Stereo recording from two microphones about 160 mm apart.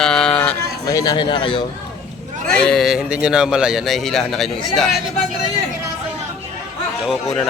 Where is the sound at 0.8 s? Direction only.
20° left (ahead or behind).